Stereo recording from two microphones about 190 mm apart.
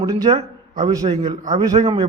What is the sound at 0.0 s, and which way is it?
A man's voice, 20° right (ahead or behind).